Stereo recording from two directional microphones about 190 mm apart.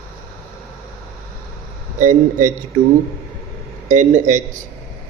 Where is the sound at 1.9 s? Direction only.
45° right (ahead or behind).